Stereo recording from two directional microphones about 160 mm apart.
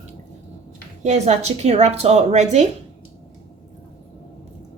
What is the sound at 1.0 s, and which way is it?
A woman's voice, 45° right (ahead or behind).